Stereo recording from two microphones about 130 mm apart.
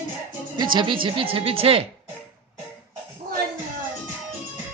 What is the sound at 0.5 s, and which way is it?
A woman's voice, 40° right (ahead or behind).